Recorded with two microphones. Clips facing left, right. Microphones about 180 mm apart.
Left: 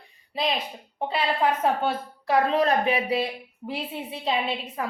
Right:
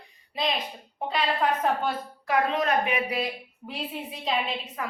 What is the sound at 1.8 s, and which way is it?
A woman's voice, 30° left (ahead or behind).